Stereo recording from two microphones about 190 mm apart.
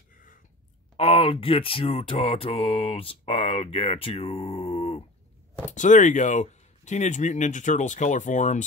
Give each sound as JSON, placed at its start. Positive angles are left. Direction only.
{"t": 0.1, "sound": "a sound", "side_deg": 45}
{"t": 0.9, "sound": "mantra", "side_deg": 30}
{"t": 5.7, "sound": "speech", "side_deg": 40}